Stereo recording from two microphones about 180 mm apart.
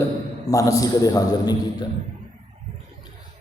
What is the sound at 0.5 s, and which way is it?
A man's voice, 20° left (ahead or behind).